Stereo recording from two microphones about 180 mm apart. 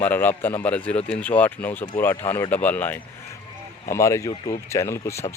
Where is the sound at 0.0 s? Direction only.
10° left (ahead or behind).